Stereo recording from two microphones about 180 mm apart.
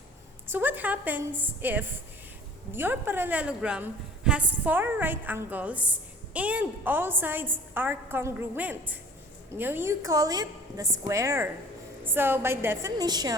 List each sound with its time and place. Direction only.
0.4 s a woman's voice: 10° right (ahead or behind)